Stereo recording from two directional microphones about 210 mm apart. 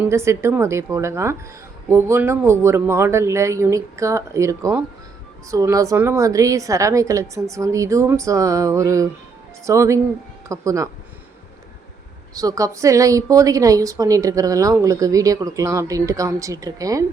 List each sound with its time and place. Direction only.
0.0 s a woman's voice: 15° right (ahead or behind)
12.3 s a woman's voice: 15° right (ahead or behind)